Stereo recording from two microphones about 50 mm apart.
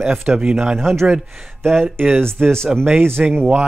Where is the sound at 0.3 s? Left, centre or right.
Right.